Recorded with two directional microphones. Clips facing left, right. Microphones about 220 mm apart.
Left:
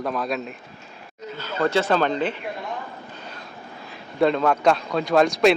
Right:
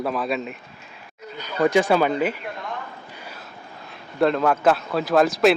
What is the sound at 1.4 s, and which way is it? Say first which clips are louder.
Speech: right 3 dB; 15° right (ahead or behind).